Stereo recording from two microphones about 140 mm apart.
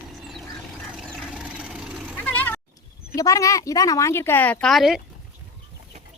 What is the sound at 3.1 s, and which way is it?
A woman's voice, 25° left (ahead or behind).